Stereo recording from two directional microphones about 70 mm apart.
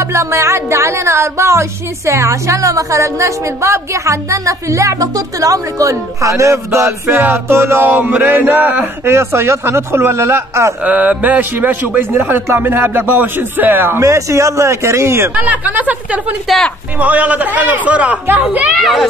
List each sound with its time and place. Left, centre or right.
0.1 s speech: right
10.9 s a man's voice: right
14.0 s speech: right
15.3 s a man's voice: right
18.8 s a child's voice: centre